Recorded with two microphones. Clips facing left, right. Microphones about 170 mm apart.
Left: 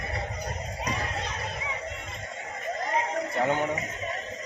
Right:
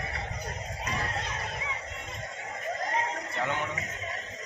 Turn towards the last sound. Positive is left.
turn(degrees=40)  # may be behind; listen again after turning